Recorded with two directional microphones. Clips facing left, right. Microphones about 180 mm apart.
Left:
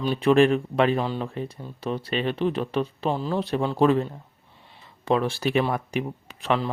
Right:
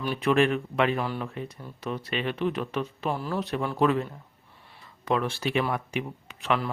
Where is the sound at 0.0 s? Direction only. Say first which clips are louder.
Left 5 dB; 30° left (ahead or behind).